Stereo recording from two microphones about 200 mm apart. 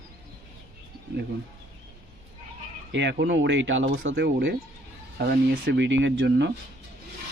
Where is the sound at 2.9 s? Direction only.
60° right (ahead or behind).